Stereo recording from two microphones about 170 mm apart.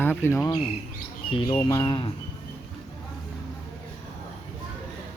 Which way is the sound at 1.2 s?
30° left (ahead or behind).